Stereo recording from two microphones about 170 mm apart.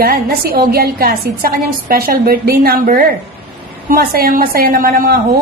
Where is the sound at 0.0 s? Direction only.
60° right (ahead or behind).